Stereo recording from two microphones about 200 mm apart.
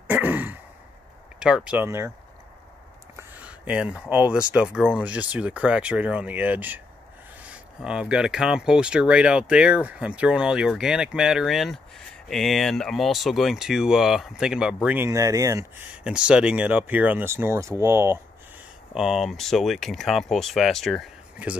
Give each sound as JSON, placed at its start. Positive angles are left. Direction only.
{"t": 0.1, "sound": "throat clearing", "side_deg": -10}
{"t": 1.4, "sound": "speech", "side_deg": -5}
{"t": 3.2, "sound": "speech", "side_deg": -10}
{"t": 18.9, "sound": "speech", "side_deg": 0}